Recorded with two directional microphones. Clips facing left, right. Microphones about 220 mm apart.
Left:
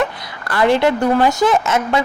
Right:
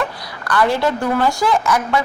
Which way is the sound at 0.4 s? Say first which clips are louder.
Left 3 dB; 25° left (ahead or behind).